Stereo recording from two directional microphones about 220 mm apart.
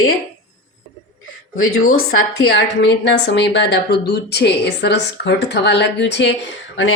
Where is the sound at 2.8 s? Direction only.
50° left (ahead or behind).